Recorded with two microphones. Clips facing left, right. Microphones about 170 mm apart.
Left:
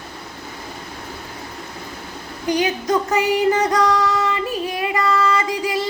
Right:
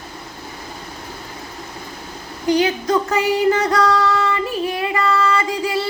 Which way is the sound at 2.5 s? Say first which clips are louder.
Right 2 dB; 15° left (ahead or behind).